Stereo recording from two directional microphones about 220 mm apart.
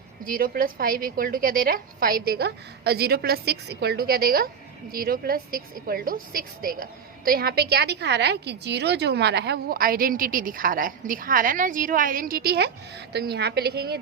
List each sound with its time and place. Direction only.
0.3 s a woman's voice: 40° right (ahead or behind)